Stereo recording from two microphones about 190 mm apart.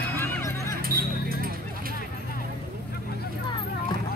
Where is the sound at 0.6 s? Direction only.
50° right (ahead or behind).